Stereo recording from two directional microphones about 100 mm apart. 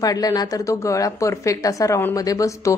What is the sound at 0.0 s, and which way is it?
A woman's voice, 40° left (ahead or behind).